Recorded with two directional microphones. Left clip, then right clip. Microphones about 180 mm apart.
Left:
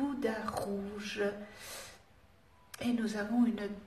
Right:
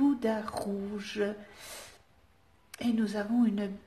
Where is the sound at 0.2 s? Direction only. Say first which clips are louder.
Right 3 dB; 50° right (ahead or behind).